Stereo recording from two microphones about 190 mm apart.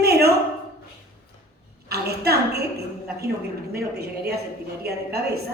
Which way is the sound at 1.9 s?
55° right (ahead or behind).